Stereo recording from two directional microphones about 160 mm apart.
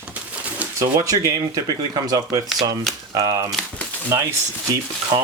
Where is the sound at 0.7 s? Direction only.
20° right (ahead or behind).